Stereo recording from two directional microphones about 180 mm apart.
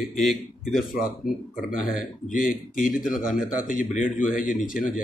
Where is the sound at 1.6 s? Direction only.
5° right (ahead or behind).